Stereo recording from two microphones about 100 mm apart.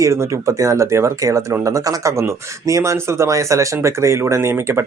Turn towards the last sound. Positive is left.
turn(degrees=-25)  # may be behind; listen again after turning